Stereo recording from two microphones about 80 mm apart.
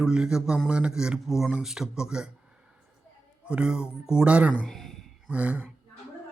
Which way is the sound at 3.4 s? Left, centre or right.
Centre.